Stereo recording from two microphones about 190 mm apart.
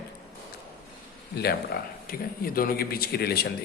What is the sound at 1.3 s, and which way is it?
A man's voice, 55° left (ahead or behind).